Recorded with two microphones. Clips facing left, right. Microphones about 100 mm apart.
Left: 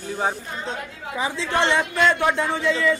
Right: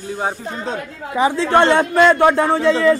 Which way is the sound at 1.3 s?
45° right (ahead or behind).